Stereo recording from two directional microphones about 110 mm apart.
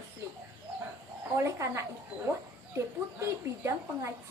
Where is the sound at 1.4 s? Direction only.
25° right (ahead or behind).